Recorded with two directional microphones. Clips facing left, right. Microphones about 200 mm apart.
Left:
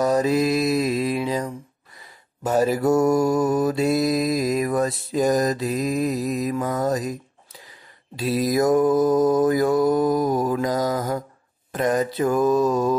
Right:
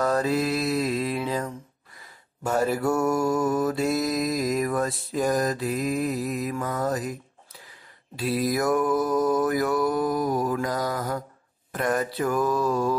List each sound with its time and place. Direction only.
0.0 s mantra: 15° left (ahead or behind)
8.2 s mantra: 20° left (ahead or behind)